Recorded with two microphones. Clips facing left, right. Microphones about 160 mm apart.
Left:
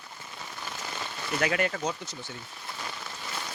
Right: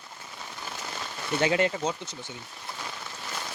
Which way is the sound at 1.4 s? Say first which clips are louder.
Right 3 dB; 25° right (ahead or behind).